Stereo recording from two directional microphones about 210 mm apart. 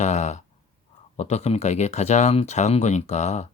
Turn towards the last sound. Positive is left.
turn(degrees=30)  # may be behind; listen again after turning